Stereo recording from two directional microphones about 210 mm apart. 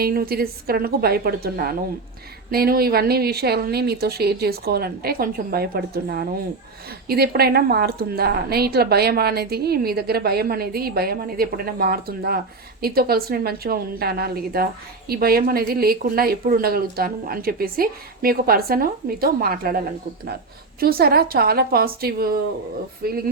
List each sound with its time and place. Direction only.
0.0 s a woman's voice: 45° right (ahead or behind)